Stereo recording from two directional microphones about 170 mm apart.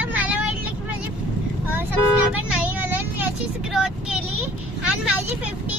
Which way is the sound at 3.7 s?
5° right (ahead or behind).